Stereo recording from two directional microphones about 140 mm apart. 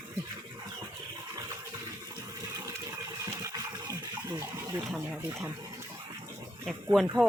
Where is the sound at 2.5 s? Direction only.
25° right (ahead or behind).